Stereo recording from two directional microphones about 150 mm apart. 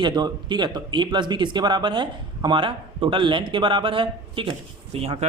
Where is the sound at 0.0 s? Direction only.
30° right (ahead or behind).